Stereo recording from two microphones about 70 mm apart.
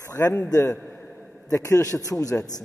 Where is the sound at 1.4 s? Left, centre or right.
Left.